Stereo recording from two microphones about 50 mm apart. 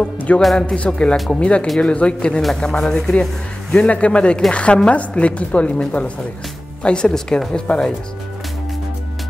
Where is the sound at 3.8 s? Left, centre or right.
Left.